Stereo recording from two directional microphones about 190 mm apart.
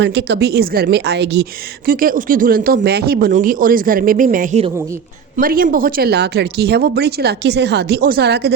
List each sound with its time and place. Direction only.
0.0 s speech: 65° right (ahead or behind)
1.9 s speech: 50° right (ahead or behind)